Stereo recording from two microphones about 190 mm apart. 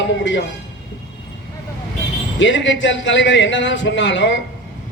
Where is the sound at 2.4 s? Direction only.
75° left (ahead or behind).